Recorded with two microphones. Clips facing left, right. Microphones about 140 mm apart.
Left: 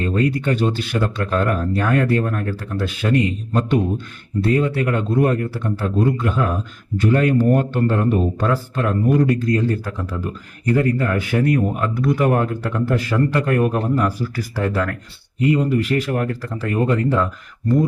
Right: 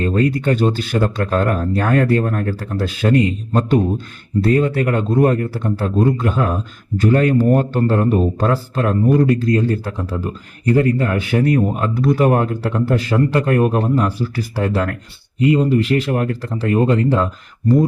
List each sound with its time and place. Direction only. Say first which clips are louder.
0.0 s speech: right 3 dB; 40° right (ahead or behind)